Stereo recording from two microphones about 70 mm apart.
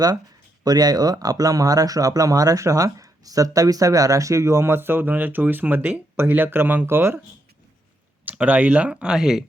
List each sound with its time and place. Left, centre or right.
0.6 s speech: right
8.2 s speech: right; by 9.4 s centre